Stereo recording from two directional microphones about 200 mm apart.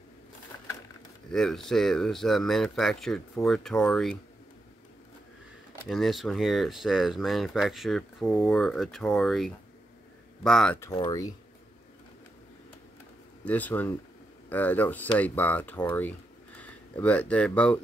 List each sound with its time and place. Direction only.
1.3 s speech: centre (ahead or behind)
5.9 s speech: centre (ahead or behind)
10.8 s speech: 20° left (ahead or behind)
13.5 s speech: 10° left (ahead or behind)